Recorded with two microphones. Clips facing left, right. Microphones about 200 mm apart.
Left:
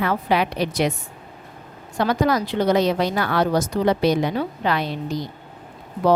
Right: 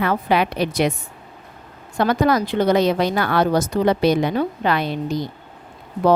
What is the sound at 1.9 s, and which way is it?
A woman's voice, 55° right (ahead or behind).